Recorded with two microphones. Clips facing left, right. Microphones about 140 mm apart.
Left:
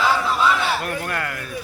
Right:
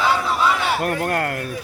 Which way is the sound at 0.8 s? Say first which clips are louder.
Right 5 dB; 50° right (ahead or behind).